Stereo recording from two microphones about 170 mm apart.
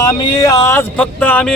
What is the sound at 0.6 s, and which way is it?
Speech, 10° left (ahead or behind).